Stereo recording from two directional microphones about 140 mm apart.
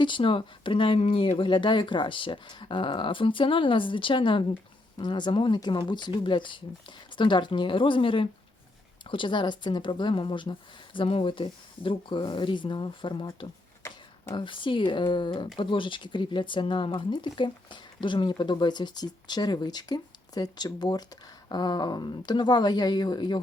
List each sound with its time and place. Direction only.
0.0 s speech: 35° left (ahead or behind)
13.8 s a sound: 20° left (ahead or behind)
14.3 s speech: 35° left (ahead or behind)